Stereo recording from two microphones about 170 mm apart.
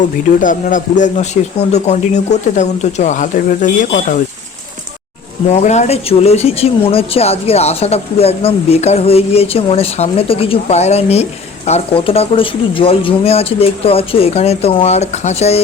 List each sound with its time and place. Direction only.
0.3 s speech: 50° left (ahead or behind)
5.5 s speech: 40° left (ahead or behind)